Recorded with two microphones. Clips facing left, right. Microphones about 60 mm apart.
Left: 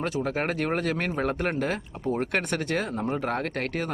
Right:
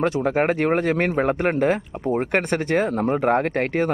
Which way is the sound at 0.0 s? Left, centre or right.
Right.